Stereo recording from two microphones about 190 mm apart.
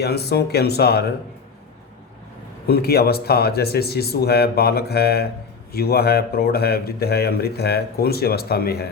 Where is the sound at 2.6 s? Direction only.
55° left (ahead or behind).